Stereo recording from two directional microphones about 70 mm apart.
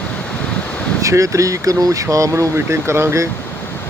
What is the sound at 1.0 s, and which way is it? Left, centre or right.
Speech, right.